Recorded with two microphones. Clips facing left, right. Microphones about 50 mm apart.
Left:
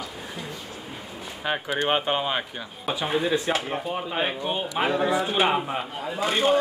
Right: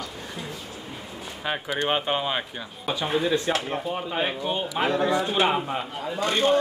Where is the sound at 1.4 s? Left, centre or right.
Centre.